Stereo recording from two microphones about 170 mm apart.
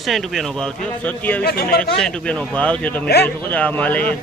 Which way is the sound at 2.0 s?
5° left (ahead or behind).